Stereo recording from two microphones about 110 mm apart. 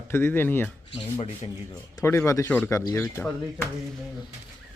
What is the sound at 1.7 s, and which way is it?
Speech, 30° left (ahead or behind).